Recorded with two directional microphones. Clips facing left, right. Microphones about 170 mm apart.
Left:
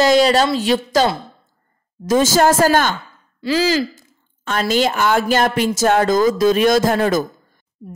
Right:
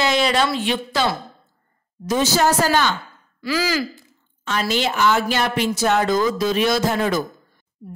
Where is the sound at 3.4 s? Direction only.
30° left (ahead or behind).